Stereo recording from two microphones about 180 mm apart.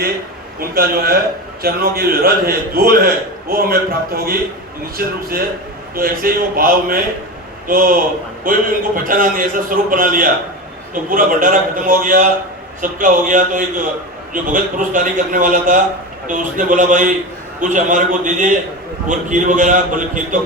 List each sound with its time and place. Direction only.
0.6 s a man's voice: 55° right (ahead or behind)